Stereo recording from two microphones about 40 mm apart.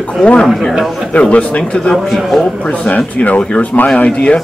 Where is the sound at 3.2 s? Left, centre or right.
Left.